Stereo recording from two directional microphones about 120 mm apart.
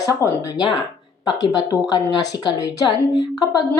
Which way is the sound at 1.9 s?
35° left (ahead or behind).